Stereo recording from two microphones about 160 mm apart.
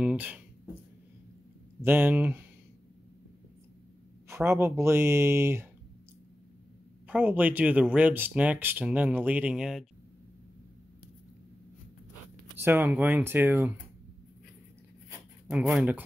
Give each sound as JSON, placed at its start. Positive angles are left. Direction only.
{"t": 0.0, "sound": "speech", "side_deg": -10}
{"t": 1.8, "sound": "speech", "side_deg": -15}
{"t": 4.3, "sound": "speech", "side_deg": -15}
{"t": 7.1, "sound": "speech", "side_deg": -10}
{"t": 12.5, "sound": "speech", "side_deg": -15}
{"t": 15.5, "sound": "speech", "side_deg": -10}